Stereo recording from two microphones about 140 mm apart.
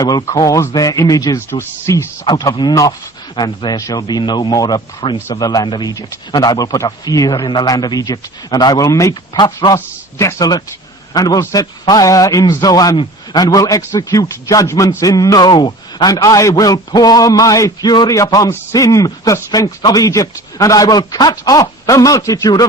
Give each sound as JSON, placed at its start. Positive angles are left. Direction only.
{"t": 0.0, "sound": "a man's voice", "side_deg": 30}
{"t": 2.2, "sound": "a man's voice", "side_deg": 30}